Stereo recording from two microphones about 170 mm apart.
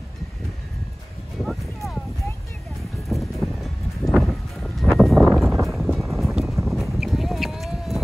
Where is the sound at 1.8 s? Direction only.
Centre (ahead or behind).